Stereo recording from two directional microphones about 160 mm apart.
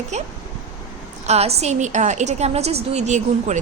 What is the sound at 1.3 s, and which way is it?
A woman's voice, 40° right (ahead or behind).